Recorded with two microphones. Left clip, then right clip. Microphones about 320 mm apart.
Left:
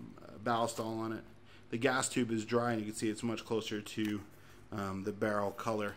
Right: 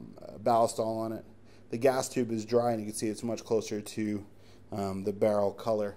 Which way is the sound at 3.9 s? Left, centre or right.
Centre.